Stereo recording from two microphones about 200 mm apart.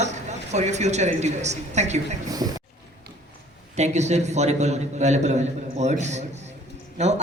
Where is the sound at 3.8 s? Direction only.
35° right (ahead or behind).